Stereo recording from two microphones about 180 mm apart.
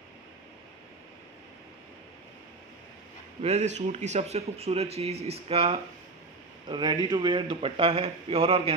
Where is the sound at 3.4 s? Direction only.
35° right (ahead or behind).